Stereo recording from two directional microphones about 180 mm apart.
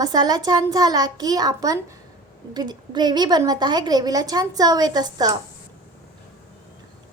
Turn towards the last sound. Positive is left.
turn(degrees=-20)  # may be behind; listen again after turning